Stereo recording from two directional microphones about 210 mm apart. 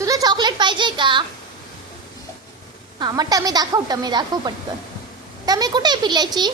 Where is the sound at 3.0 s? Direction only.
20° right (ahead or behind).